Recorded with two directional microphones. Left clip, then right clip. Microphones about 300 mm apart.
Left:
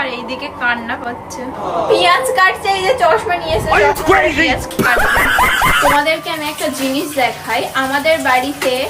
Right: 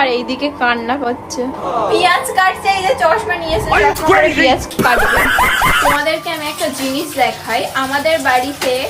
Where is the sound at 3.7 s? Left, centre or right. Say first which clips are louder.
Even; centre.